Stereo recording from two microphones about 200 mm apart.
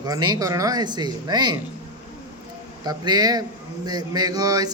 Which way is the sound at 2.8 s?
20° right (ahead or behind).